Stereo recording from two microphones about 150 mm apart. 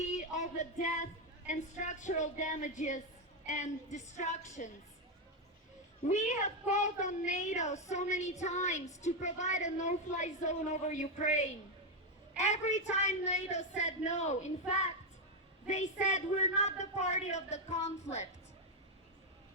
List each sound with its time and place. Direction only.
0.0 s a sound: 55° left (ahead or behind)
1.5 s speech: 55° left (ahead or behind)
6.1 s speech: 50° left (ahead or behind)
15.6 s speech: 50° left (ahead or behind)